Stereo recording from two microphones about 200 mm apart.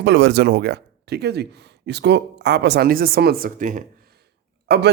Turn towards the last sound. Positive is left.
turn(degrees=-55)  # may be behind; listen again after turning